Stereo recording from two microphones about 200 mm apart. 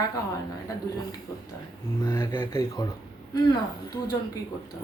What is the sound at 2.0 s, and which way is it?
Speech, 15° left (ahead or behind).